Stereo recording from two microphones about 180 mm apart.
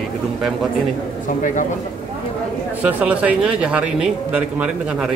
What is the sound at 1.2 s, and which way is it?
Speech, 45° left (ahead or behind).